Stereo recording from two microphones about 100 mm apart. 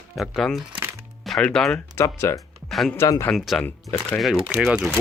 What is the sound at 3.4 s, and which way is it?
Speech, centre (ahead or behind).